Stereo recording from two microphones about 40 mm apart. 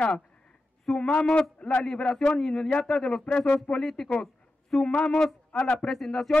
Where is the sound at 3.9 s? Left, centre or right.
Centre.